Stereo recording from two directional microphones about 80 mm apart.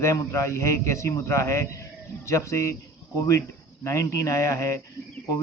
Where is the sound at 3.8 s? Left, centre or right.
Left.